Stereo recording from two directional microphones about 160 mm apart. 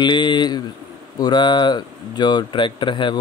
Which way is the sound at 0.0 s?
30° left (ahead or behind).